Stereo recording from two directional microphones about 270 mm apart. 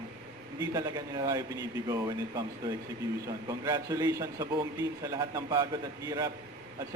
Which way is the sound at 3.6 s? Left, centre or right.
Centre.